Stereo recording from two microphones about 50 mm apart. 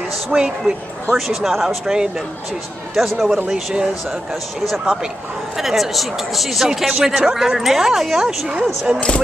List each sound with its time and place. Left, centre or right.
0.3 s speech: centre
1.1 s speech: centre
1.9 s speech: centre
2.9 s speech: centre
3.4 s speech: centre
5.6 s speech: centre